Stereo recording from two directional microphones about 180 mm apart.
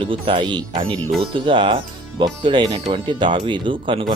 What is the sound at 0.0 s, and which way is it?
Speech, 30° right (ahead or behind).